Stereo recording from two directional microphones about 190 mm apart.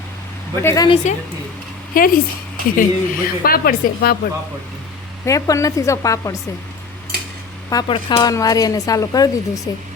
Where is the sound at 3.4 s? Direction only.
50° left (ahead or behind).